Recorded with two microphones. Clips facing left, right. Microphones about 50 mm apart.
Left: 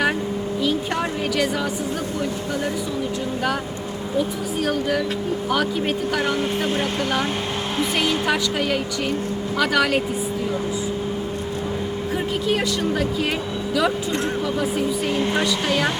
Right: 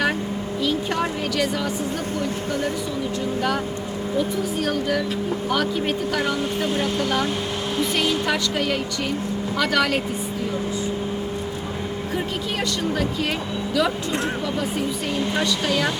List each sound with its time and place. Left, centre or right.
0.6 s a sound: centre
4.6 s speech: centre
6.7 s speech: left
7.9 s speech: centre
15.4 s speech: centre